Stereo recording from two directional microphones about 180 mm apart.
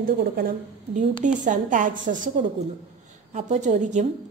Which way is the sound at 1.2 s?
45° right (ahead or behind).